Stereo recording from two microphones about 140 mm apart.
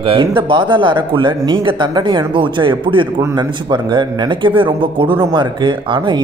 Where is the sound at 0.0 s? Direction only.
40° right (ahead or behind).